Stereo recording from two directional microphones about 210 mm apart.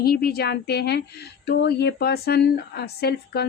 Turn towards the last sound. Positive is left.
turn(degrees=50)  # may be behind; listen again after turning